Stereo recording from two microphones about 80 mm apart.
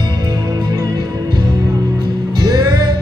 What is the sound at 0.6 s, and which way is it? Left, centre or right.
Music, right.